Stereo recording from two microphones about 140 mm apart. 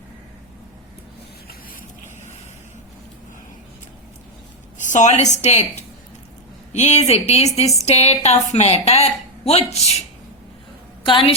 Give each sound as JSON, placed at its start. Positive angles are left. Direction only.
{"t": 4.9, "sound": "a woman's voice", "side_deg": 60}
{"t": 11.0, "sound": "a woman's voice", "side_deg": 40}